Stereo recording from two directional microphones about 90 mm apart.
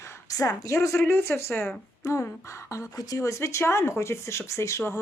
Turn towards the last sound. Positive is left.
turn(degrees=35)  # may be behind; listen again after turning